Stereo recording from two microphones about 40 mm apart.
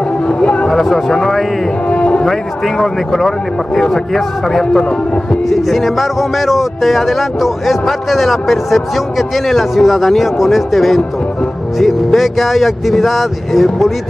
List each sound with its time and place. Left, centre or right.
0.3 s a sound: left
0.7 s speech: centre
1.9 s music: left
2.2 s speech: centre